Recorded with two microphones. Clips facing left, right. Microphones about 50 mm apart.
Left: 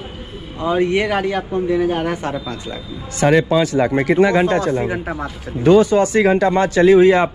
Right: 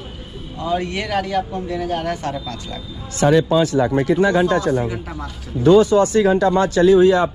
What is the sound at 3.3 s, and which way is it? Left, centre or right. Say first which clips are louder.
Speech: left 1 dB; left.